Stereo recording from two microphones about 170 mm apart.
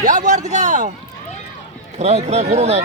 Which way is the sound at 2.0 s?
40° right (ahead or behind).